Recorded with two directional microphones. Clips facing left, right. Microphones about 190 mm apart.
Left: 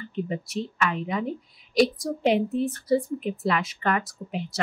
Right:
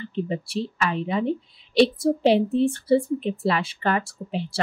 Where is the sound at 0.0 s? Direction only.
30° right (ahead or behind).